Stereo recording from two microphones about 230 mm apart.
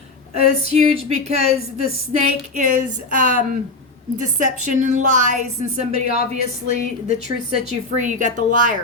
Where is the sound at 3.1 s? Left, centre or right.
Right.